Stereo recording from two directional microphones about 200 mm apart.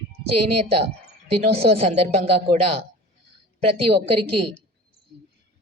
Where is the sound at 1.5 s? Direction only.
30° right (ahead or behind).